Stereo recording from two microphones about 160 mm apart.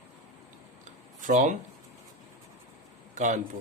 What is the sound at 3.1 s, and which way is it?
Speech, 50° right (ahead or behind).